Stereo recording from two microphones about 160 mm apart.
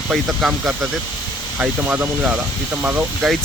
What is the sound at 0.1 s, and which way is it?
Speech, 5° right (ahead or behind).